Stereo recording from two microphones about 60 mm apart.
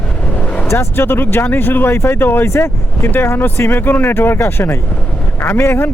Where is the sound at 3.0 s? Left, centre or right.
Left.